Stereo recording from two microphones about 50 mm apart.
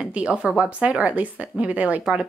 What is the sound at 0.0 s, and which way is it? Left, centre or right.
Speech, right.